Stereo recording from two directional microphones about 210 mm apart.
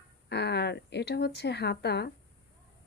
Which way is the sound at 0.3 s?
55° left (ahead or behind).